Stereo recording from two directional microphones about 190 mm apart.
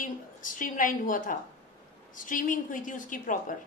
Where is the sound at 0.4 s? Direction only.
45° left (ahead or behind).